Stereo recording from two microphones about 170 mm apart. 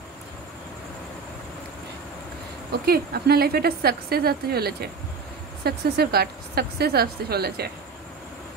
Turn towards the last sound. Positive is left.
turn(degrees=-70)  # may be behind; listen again after turning